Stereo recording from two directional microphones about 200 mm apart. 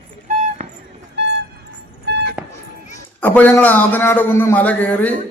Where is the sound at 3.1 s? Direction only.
10° left (ahead or behind).